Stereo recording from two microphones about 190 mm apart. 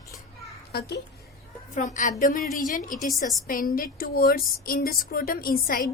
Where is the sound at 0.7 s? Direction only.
60° left (ahead or behind).